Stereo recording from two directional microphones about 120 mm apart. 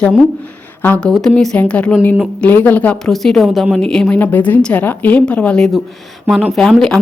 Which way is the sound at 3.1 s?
Centre (ahead or behind).